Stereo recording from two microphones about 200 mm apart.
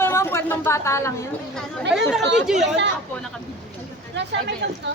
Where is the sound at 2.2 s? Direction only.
60° right (ahead or behind).